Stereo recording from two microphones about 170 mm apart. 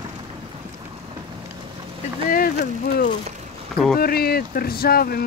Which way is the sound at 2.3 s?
55° left (ahead or behind).